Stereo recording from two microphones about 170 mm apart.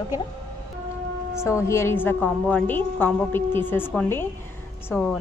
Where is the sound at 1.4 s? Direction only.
15° left (ahead or behind).